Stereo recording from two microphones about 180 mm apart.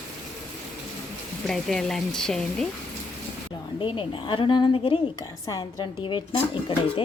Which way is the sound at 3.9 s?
25° left (ahead or behind).